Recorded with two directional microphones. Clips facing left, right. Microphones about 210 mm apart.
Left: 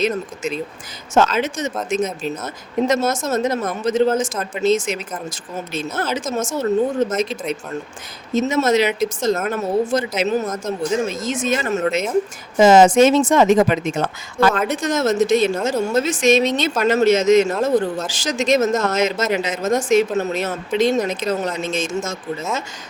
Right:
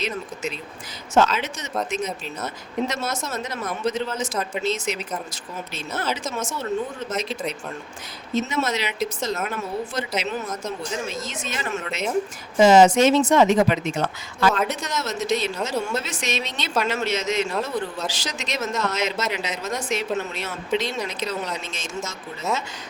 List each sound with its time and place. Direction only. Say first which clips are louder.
0.0 s speech: left 7 dB; 45° left (ahead or behind)
6.1 s speech: left 7 dB; 45° left (ahead or behind)